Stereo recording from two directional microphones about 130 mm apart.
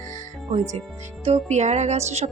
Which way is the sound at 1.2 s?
55° right (ahead or behind).